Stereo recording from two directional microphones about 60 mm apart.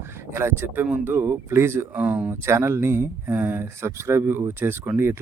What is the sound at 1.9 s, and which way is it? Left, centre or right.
Speech, right.